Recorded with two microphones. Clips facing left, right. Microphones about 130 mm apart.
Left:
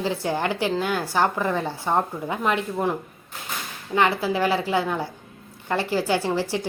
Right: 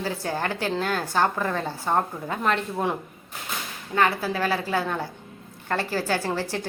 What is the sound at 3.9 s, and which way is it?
Speech, 15° left (ahead or behind).